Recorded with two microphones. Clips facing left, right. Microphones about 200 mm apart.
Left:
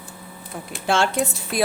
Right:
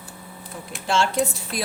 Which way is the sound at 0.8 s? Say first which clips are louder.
Left 2 dB; 60° left (ahead or behind).